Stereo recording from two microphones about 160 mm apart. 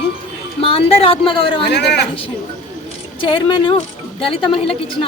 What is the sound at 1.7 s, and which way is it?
Speech, 90° left.